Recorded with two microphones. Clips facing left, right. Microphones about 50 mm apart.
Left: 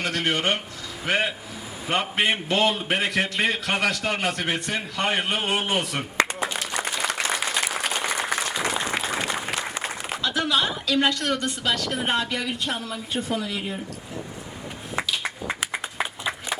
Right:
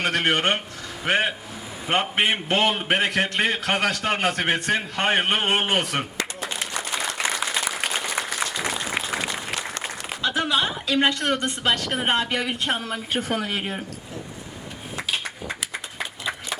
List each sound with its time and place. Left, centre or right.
0.0 s a man's voice: right
9.3 s applause: centre
10.2 s a man's voice: right